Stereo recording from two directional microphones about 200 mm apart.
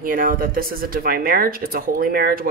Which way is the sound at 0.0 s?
45° right (ahead or behind).